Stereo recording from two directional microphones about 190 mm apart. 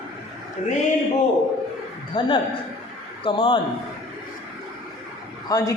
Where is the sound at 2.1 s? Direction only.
20° left (ahead or behind).